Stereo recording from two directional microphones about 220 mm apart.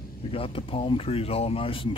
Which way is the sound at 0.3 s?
25° left (ahead or behind).